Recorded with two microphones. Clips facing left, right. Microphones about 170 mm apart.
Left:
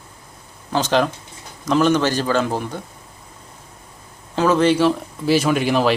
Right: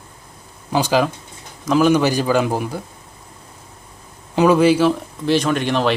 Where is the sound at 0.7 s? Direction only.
10° right (ahead or behind).